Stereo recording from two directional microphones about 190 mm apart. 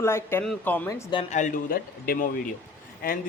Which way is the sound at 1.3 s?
40° left (ahead or behind).